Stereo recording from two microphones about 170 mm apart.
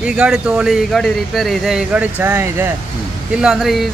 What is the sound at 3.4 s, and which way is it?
Speech, 5° right (ahead or behind).